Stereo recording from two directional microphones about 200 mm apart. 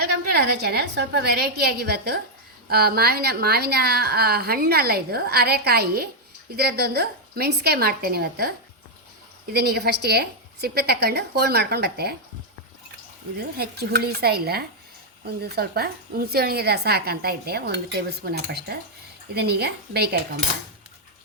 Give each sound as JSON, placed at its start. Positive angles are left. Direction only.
{"t": 0.0, "sound": "a woman's voice", "side_deg": -50}
{"t": 13.6, "sound": "a woman's voice", "side_deg": -55}